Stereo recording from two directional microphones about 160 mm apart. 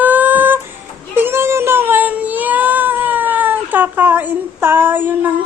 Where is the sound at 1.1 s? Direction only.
15° right (ahead or behind).